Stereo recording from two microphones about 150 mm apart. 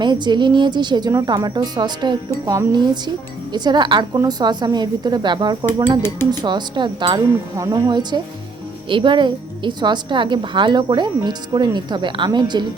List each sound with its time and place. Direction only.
0.0 s a woman's voice: 30° right (ahead or behind)